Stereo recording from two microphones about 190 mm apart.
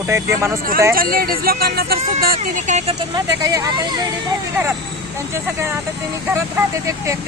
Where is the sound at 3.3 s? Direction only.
20° right (ahead or behind).